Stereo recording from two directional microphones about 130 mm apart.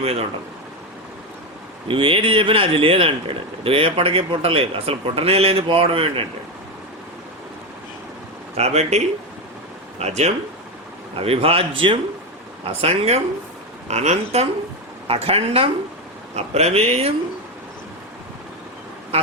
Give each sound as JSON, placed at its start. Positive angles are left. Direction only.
{"t": 0.0, "sound": "speech", "side_deg": -50}
{"t": 1.9, "sound": "speech", "side_deg": -40}
{"t": 8.5, "sound": "speech", "side_deg": -55}
{"t": 10.0, "sound": "speech", "side_deg": -55}